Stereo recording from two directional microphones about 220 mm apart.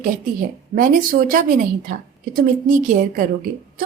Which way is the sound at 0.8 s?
40° right (ahead or behind).